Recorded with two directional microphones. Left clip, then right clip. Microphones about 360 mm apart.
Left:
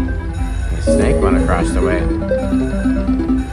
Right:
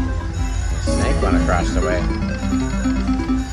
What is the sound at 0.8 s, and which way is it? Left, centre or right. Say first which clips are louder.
Music: left 7 dB; centre.